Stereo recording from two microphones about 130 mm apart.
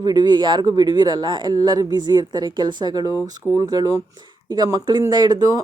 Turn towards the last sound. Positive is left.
turn(degrees=-30)  # may be behind; listen again after turning